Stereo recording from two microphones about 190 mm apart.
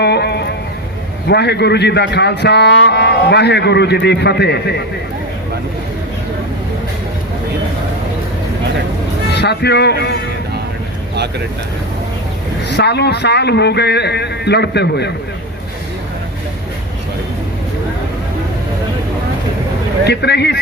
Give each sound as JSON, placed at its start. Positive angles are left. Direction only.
{"t": 0.0, "sound": "a sound", "side_deg": 60}
{"t": 1.3, "sound": "speech", "side_deg": 60}
{"t": 9.4, "sound": "speech", "side_deg": 60}
{"t": 12.6, "sound": "speech", "side_deg": 60}
{"t": 20.1, "sound": "speech", "side_deg": 60}